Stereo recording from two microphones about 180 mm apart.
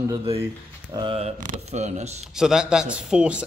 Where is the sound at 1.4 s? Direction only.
40° right (ahead or behind).